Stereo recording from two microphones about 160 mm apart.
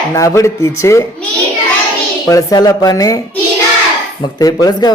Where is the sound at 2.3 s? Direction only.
20° left (ahead or behind).